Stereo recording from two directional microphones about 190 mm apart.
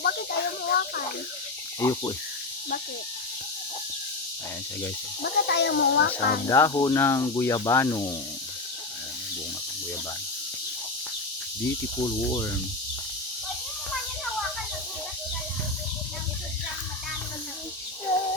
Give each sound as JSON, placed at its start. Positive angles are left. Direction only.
{"t": 0.0, "sound": "snake", "side_deg": 55}
{"t": 1.8, "sound": "speech", "side_deg": 20}
{"t": 5.2, "sound": "speech", "side_deg": 60}
{"t": 6.5, "sound": "speech", "side_deg": 20}
{"t": 11.6, "sound": "speech", "side_deg": 15}